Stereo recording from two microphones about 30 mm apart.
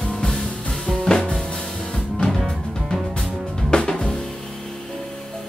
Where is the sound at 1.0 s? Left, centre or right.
Left.